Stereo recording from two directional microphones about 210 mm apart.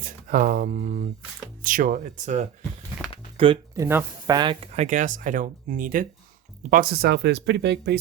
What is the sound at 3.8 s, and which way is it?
Speech, 15° right (ahead or behind).